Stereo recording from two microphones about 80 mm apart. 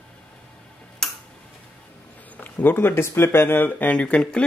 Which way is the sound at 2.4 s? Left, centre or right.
Left.